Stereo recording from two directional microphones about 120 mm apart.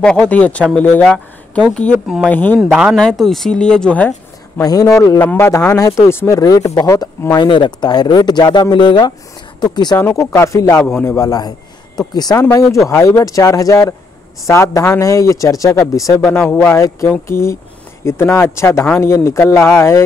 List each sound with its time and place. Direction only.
0.0 s speech: 5° left (ahead or behind)
2.6 s speech: 5° right (ahead or behind)
3.0 s speech: 5° left (ahead or behind)
4.6 s a man's voice: 30° left (ahead or behind)
5.2 s speech: 15° left (ahead or behind)
5.5 s speech: 30° left (ahead or behind)
9.9 s a man's voice: 25° left (ahead or behind)